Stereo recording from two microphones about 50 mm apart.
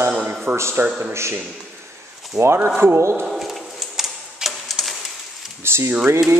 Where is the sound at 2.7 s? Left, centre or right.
Right.